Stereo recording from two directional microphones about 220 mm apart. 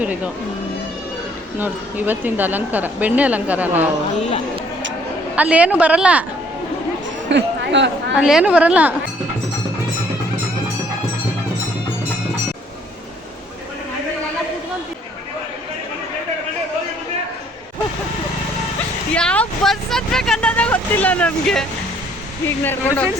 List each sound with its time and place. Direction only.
1.5 s speech: 10° right (ahead or behind)
5.4 s a woman's voice: 5° right (ahead or behind)
7.3 s a sound: 55° right (ahead or behind)
8.1 s a woman's voice: 5° right (ahead or behind)
19.1 s vehicle: 5° left (ahead or behind)
22.4 s speech: 10° left (ahead or behind)